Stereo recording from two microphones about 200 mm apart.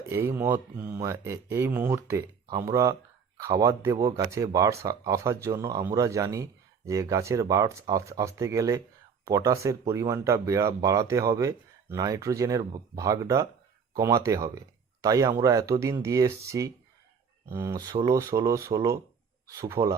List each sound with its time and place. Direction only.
0.0 s speech: 10° right (ahead or behind)